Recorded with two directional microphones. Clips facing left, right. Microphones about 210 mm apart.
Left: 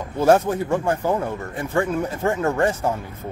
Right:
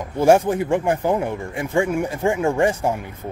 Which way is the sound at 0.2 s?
15° right (ahead or behind).